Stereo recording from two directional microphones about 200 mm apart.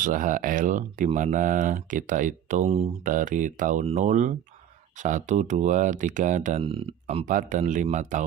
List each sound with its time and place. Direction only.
0.0 s speech: 40° right (ahead or behind)
3.0 s speech: 40° right (ahead or behind)
6.7 s speech: 25° right (ahead or behind)
7.3 s speech: 40° right (ahead or behind)